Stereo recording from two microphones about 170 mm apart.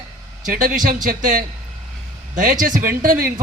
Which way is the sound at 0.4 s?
50° right (ahead or behind).